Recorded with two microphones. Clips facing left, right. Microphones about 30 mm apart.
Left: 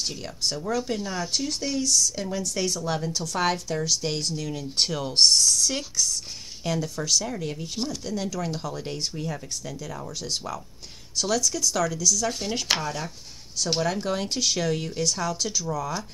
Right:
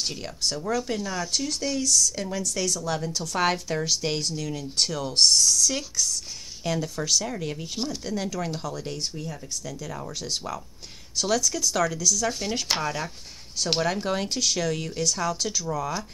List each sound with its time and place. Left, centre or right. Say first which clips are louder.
0.7 s speech: even; centre
2.6 s speech: left 1 dB; left
3.0 s speech: left 1 dB; centre
3.3 s speech: right 1 dB; centre
4.2 s speech: even; centre
4.7 s speech: left 1 dB; centre
6.6 s speech: even; centre
9.2 s speech: left 3 dB; left
9.8 s speech: even; centre
12.8 s speech: right 2 dB; centre
14.3 s speech: left 1 dB; centre
15.1 s speech: right 1 dB; centre